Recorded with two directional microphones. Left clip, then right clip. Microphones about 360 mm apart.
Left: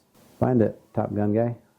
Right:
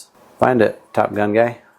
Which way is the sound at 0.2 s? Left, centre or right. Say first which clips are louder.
Right 9 dB; centre.